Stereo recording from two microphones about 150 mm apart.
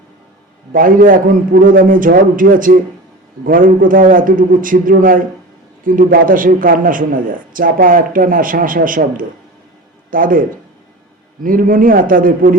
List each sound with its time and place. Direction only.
0.7 s a man's voice: 70° right (ahead or behind)
11.4 s a man's voice: 65° right (ahead or behind)